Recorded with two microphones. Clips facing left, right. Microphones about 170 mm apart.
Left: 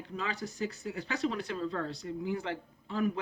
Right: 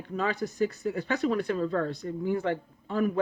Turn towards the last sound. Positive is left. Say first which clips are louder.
# right 5 dB
turn(degrees=-50)  # may be behind; listen again after turning